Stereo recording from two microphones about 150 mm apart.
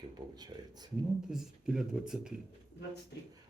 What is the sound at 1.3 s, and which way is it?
Speech, 5° right (ahead or behind).